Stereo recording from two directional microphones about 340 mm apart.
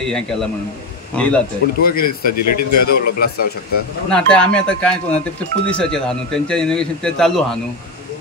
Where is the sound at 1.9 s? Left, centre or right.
Left.